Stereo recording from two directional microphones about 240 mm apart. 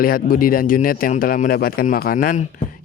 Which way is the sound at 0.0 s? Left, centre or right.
Left.